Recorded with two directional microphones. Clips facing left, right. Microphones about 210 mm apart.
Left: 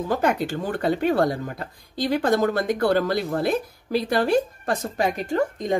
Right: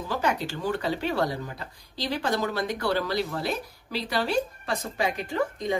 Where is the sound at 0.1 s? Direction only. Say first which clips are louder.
Left 4 dB; 50° left (ahead or behind).